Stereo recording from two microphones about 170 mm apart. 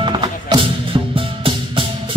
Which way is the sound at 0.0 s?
30° right (ahead or behind).